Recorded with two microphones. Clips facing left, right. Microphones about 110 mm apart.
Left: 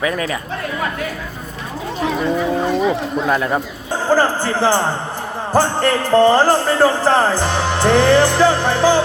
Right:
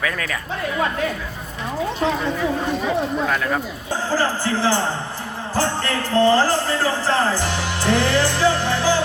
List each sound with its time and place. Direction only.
0.0 s a woman's voice: 20° left (ahead or behind)
3.3 s a woman's voice: 20° left (ahead or behind)
4.1 s speech: 55° left (ahead or behind)
5.5 s music: 55° left (ahead or behind)